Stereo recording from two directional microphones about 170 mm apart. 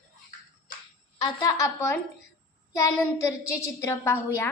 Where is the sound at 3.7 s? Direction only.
15° left (ahead or behind).